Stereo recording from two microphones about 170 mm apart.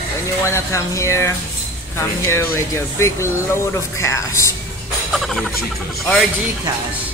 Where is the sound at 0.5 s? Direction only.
15° left (ahead or behind).